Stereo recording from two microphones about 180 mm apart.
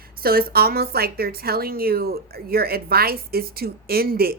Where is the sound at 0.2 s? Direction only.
55° right (ahead or behind).